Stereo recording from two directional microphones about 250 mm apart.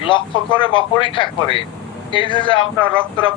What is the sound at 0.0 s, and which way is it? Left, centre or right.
Speech, centre.